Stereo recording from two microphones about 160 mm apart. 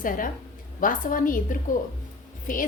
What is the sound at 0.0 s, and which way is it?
A woman's voice, 60° left (ahead or behind).